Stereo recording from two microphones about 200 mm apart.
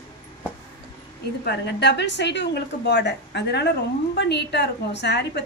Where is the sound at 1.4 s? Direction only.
55° left (ahead or behind).